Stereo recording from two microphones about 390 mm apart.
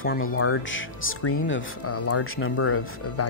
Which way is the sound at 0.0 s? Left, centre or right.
Left.